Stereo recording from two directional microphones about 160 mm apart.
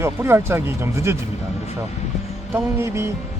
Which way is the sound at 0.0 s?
15° right (ahead or behind).